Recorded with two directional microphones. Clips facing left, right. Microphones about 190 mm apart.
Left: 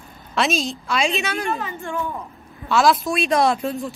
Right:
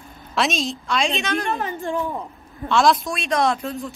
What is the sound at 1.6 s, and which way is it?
Speech, 35° right (ahead or behind).